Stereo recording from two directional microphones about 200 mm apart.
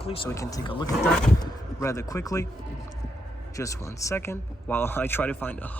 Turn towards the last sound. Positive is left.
turn(degrees=10)  # may be behind; listen again after turning